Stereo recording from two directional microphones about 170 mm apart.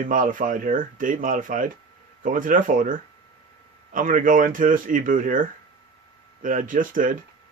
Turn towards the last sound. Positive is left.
turn(degrees=-50)  # may be behind; listen again after turning